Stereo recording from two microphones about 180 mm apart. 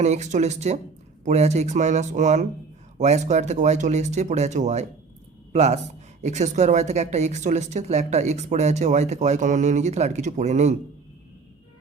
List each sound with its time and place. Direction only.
0.0 s speech: 40° right (ahead or behind)